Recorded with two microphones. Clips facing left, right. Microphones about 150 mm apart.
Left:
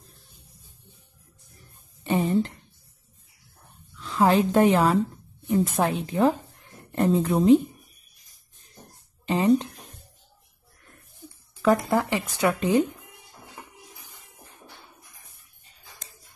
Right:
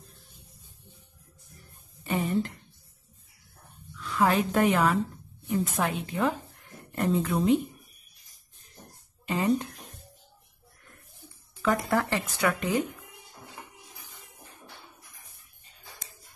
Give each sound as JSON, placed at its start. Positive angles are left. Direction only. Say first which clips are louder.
{"t": 2.0, "sound": "speech", "louder": "left 5 dB", "side_deg": 30}
{"t": 4.0, "sound": "a woman's voice", "louder": "left 4 dB", "side_deg": 30}
{"t": 9.2, "sound": "a sound", "louder": "left 5 dB", "side_deg": 25}
{"t": 11.9, "sound": "speech", "louder": "left 3 dB", "side_deg": 20}